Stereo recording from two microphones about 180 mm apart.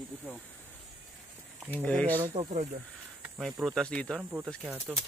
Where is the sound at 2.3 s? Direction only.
40° right (ahead or behind).